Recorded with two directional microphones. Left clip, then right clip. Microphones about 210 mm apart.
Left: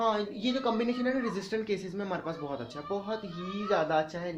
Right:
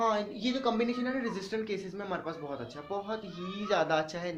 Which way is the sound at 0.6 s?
35° left (ahead or behind).